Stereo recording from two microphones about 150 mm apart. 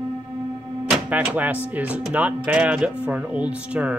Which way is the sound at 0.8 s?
5° right (ahead or behind).